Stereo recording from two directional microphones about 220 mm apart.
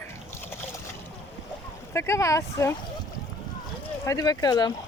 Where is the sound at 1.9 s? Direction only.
15° left (ahead or behind).